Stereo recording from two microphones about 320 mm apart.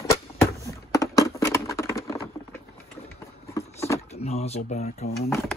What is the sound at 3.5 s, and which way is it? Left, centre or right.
Vehicle, centre.